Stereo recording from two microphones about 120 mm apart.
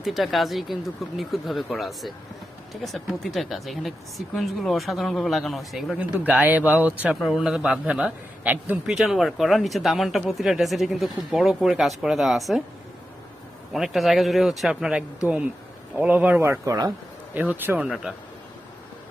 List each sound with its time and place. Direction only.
0.0 s speech: centre (ahead or behind)
6.0 s a man's voice: 15° right (ahead or behind)
7.2 s a man's voice: centre (ahead or behind)
8.9 s speech: centre (ahead or behind)
13.7 s a man's voice: centre (ahead or behind)
16.4 s a man's voice: 25° right (ahead or behind)
17.8 s speech: 5° right (ahead or behind)